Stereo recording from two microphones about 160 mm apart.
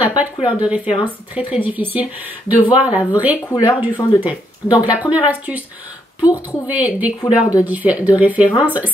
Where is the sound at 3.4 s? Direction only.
25° left (ahead or behind).